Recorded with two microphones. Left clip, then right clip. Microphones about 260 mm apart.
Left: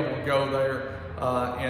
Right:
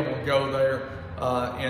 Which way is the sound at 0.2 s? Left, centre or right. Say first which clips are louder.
Right 2 dB; centre.